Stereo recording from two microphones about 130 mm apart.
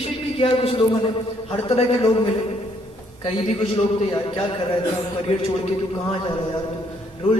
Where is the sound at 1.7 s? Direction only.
45° left (ahead or behind).